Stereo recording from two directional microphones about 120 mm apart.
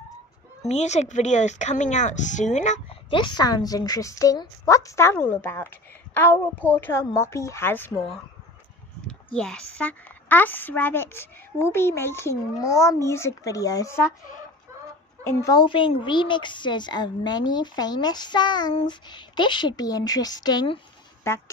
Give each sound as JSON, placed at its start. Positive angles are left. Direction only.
{"t": 0.7, "sound": "speech", "side_deg": 70}
{"t": 2.9, "sound": "a woman's voice", "side_deg": 45}
{"t": 9.0, "sound": "a woman's voice", "side_deg": 5}
{"t": 15.2, "sound": "a woman's voice", "side_deg": 25}
{"t": 15.6, "sound": "a woman's voice", "side_deg": 45}